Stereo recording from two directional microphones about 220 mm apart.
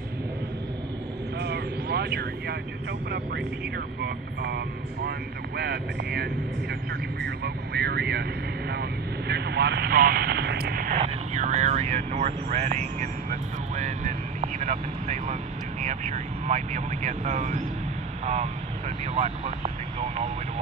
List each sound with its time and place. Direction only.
1.4 s vehicle: 45° right (ahead or behind)
4.0 s speech: 50° right (ahead or behind); by 19.7 s 30° right (ahead or behind)